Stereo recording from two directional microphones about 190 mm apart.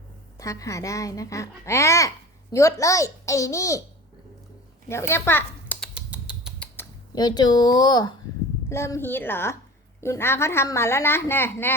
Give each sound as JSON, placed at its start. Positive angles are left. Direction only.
{"t": 0.3, "sound": "a child's voice", "side_deg": 15}
{"t": 4.9, "sound": "speech", "side_deg": 15}
{"t": 5.9, "sound": "typing", "side_deg": -5}
{"t": 7.1, "sound": "a child's voice", "side_deg": 20}